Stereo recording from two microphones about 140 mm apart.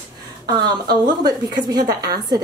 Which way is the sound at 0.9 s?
30° right (ahead or behind).